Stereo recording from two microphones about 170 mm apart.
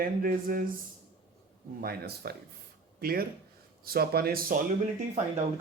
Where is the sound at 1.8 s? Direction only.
65° right (ahead or behind).